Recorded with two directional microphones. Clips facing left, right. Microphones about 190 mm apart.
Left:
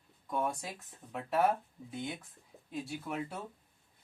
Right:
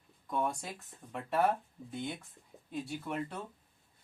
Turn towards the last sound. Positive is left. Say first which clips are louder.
# right 1 dB
turn(degrees=5)  # may be behind; listen again after turning